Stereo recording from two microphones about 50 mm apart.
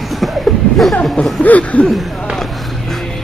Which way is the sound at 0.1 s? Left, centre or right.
Centre.